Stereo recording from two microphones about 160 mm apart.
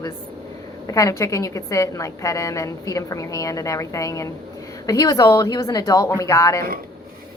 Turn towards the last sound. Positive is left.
turn(degrees=20)  # may be behind; listen again after turning